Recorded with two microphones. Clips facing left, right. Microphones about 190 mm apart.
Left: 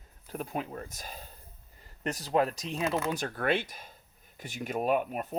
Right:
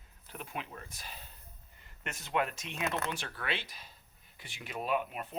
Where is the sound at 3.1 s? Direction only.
45° left (ahead or behind).